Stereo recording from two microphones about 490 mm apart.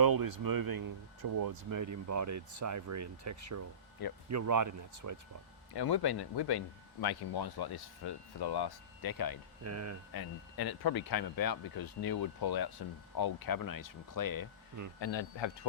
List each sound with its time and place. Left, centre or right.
0.0 s speech: right
5.7 s speech: left
9.6 s speech: right
10.1 s speech: left
14.9 s speech: left